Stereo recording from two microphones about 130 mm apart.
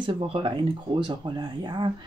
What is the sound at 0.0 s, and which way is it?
Speech, 45° right (ahead or behind).